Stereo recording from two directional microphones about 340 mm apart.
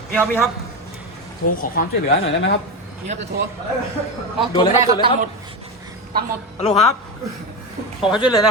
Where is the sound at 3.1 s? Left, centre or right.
Right.